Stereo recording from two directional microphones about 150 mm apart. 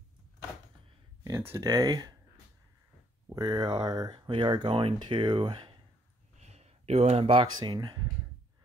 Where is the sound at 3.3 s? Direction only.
25° right (ahead or behind).